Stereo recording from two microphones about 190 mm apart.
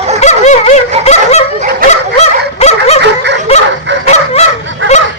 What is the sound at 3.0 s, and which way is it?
Snicker, 65° right (ahead or behind).